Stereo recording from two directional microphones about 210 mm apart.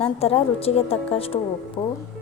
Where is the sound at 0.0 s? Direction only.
30° left (ahead or behind).